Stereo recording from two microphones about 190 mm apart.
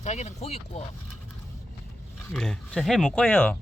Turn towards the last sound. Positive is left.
turn(degrees=5)  # may be behind; listen again after turning